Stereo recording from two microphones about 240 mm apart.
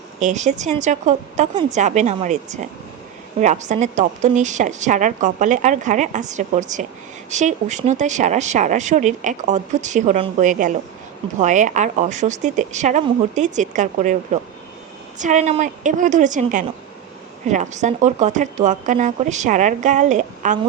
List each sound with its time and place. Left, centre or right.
0.2 s a woman's voice: right